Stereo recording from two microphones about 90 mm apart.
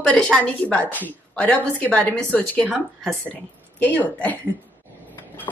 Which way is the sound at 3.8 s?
20° left (ahead or behind).